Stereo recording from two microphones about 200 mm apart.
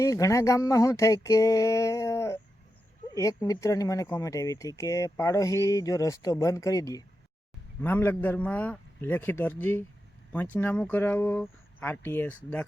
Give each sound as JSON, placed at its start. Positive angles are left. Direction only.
{"t": 0.0, "sound": "speech", "side_deg": 15}